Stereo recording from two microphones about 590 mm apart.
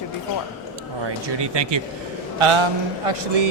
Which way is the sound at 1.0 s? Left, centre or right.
Right.